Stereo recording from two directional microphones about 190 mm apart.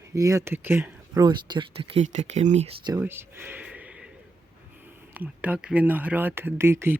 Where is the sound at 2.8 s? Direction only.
15° right (ahead or behind).